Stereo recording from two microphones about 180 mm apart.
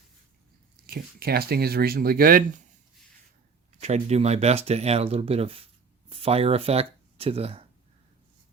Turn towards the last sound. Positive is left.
turn(degrees=-35)  # may be behind; listen again after turning